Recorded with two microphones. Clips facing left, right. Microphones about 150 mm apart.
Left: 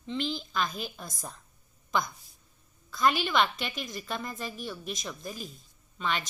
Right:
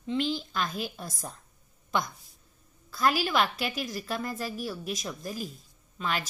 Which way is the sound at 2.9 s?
5° right (ahead or behind).